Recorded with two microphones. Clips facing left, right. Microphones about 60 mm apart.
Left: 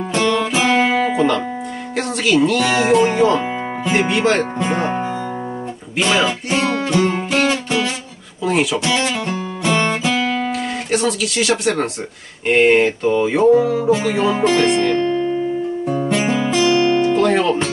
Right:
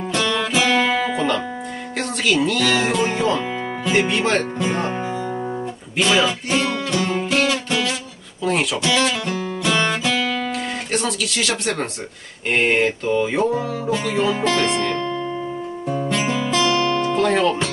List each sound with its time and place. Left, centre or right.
0.1 s music: left
1.1 s music: centre
2.0 s speech: centre
3.0 s music: centre
3.8 s speech: left
4.1 s music: centre
8.5 s music: centre
8.8 s speech: centre
9.7 s music: left
10.9 s speech: centre
12.4 s music: centre
15.0 s music: centre